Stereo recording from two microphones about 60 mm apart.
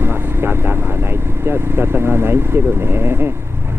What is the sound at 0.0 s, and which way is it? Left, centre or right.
Vehicle, right.